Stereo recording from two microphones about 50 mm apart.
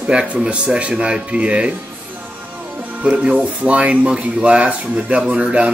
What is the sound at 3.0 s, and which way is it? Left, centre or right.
Speech, right.